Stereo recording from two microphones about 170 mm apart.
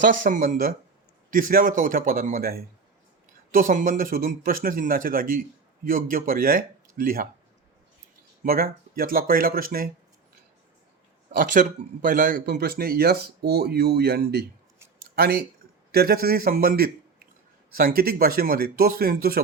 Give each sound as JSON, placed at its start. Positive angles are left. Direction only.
{"t": 0.0, "sound": "speech", "side_deg": -50}
{"t": 3.5, "sound": "speech", "side_deg": -50}
{"t": 8.4, "sound": "speech", "side_deg": -60}
{"t": 11.3, "sound": "speech", "side_deg": -50}
{"t": 14.9, "sound": "a sound", "side_deg": -65}
{"t": 15.9, "sound": "a man's voice", "side_deg": -65}